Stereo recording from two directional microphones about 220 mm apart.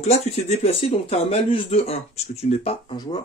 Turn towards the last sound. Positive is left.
turn(degrees=20)  # may be behind; listen again after turning